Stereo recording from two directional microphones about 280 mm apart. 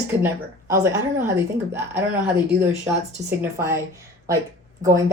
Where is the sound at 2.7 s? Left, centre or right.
Centre.